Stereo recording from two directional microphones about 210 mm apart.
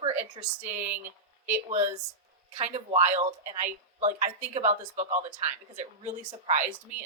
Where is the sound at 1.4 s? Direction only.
35° right (ahead or behind).